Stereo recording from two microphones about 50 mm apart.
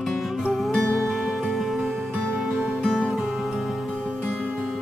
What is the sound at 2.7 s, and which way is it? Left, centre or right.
Music, centre.